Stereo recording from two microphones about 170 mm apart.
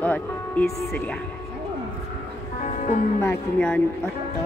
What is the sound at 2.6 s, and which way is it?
Music, 45° left (ahead or behind).